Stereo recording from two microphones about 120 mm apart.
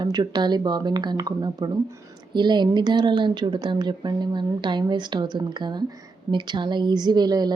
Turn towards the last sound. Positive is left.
turn(degrees=-35)  # may be behind; listen again after turning